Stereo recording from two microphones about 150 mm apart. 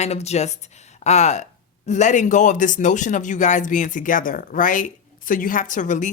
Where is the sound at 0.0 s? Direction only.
45° left (ahead or behind).